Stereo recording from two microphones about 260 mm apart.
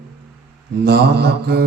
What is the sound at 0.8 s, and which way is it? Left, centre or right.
Mantra, right.